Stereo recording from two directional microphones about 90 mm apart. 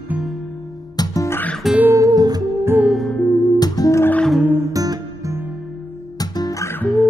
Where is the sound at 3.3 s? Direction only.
45° left (ahead or behind).